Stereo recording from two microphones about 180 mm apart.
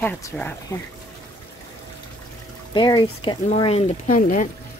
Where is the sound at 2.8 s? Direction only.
25° left (ahead or behind).